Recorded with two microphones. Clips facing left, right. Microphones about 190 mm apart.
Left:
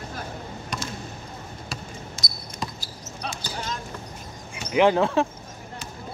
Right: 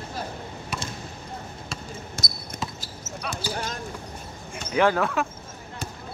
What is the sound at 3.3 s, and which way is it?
Basketball bounce, 55° right (ahead or behind).